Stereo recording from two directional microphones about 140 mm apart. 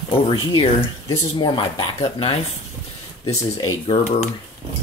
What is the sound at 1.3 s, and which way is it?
Speech, 35° left (ahead or behind).